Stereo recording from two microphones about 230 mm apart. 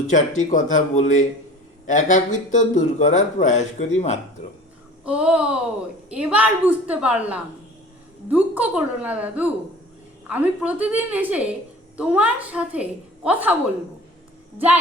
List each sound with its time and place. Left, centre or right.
0.1 s speech: left
5.0 s a woman's voice: centre